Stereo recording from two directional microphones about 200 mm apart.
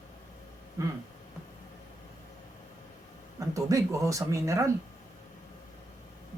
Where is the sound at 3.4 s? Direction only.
15° right (ahead or behind).